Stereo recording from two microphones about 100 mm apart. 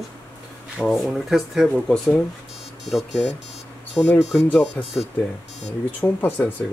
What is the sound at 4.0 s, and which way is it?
Speech, 25° left (ahead or behind).